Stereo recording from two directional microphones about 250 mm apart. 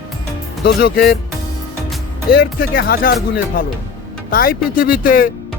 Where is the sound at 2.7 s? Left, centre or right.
Left.